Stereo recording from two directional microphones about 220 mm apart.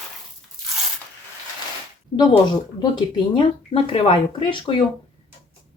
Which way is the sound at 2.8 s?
20° left (ahead or behind).